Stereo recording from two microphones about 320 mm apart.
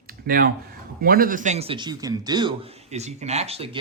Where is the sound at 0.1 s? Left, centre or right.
Right.